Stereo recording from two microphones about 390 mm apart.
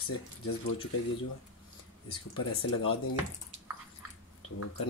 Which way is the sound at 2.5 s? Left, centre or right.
Left.